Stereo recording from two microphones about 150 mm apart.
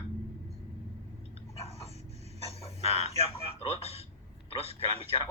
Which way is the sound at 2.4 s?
40° left (ahead or behind).